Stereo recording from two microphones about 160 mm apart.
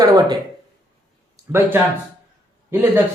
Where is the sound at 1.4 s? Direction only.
20° right (ahead or behind).